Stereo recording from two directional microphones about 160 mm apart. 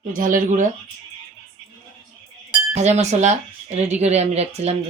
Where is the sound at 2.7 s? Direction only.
45° right (ahead or behind).